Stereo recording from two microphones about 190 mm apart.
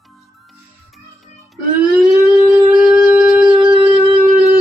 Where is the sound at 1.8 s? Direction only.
5° right (ahead or behind).